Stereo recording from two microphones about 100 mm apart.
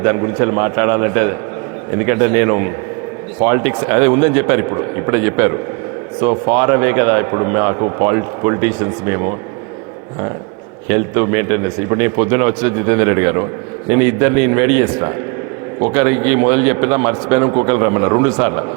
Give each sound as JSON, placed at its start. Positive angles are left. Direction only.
{"t": 0.0, "sound": "a man's voice", "side_deg": -30}
{"t": 10.8, "sound": "a man's voice", "side_deg": -25}